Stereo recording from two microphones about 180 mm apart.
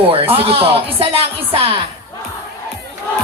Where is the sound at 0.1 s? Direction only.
30° right (ahead or behind).